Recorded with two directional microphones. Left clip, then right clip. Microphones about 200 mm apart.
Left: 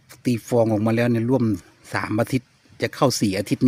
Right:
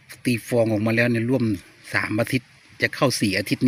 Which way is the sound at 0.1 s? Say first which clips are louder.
Left 1 dB; 15° left (ahead or behind).